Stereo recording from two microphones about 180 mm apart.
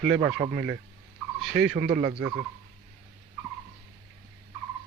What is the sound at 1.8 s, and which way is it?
Speech, 50° right (ahead or behind).